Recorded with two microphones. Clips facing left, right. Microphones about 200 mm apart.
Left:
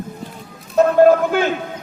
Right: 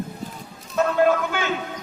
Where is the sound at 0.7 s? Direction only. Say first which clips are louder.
Left 8 dB; 40° left (ahead or behind).